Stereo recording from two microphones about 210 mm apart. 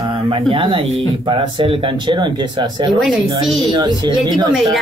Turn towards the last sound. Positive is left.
turn(degrees=-20)  # may be behind; listen again after turning